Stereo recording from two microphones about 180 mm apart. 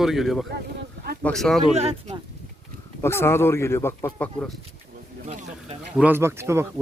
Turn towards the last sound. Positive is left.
turn(degrees=-15)  # may be behind; listen again after turning